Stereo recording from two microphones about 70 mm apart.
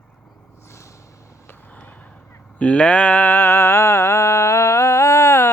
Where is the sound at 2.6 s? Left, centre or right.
Centre.